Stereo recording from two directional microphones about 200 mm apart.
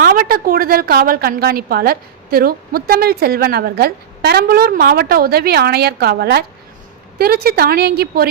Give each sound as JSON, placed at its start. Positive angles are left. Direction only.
{"t": 0.0, "sound": "a woman's voice", "side_deg": -45}